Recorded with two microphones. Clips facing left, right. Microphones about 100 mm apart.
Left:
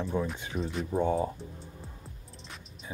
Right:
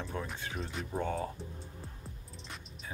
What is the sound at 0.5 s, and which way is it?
Speech, centre (ahead or behind).